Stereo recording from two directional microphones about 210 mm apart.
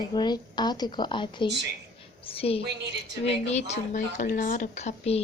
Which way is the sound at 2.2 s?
25° left (ahead or behind).